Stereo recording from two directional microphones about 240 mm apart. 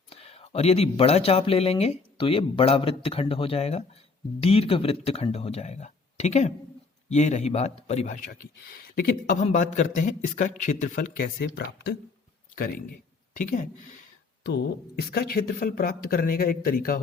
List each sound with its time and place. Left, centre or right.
0.1 s a man's voice: left